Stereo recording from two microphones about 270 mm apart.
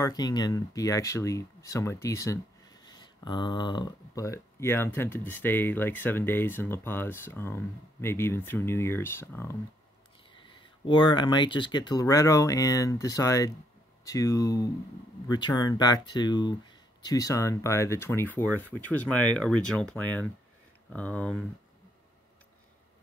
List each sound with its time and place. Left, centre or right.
0.0 s speech: centre